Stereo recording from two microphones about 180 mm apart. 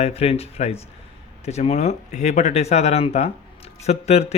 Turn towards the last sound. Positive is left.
turn(degrees=35)  # may be behind; listen again after turning